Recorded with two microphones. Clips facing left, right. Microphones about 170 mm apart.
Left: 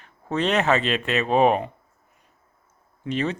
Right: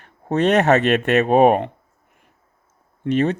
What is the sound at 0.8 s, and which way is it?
Speech, 60° right (ahead or behind).